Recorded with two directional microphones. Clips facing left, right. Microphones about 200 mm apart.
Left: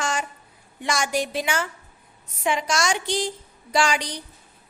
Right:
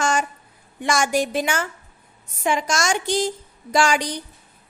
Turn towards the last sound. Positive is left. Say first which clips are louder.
# right 3 dB
turn(degrees=-50)  # may be behind; listen again after turning